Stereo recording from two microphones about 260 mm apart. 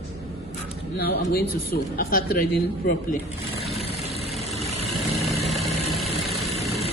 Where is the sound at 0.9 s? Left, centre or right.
Left.